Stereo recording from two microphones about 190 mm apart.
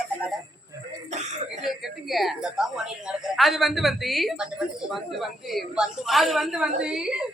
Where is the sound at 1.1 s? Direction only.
35° right (ahead or behind).